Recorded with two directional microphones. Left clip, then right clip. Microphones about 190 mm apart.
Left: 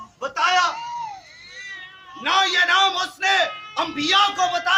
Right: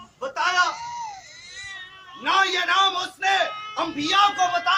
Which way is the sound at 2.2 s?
5° left (ahead or behind).